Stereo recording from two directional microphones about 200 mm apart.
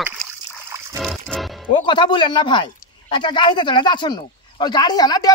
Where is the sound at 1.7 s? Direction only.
25° left (ahead or behind).